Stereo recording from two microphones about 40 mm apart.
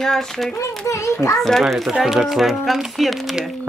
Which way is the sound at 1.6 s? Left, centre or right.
Centre.